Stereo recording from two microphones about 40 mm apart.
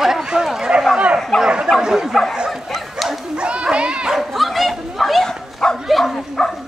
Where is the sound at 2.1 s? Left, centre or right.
Centre.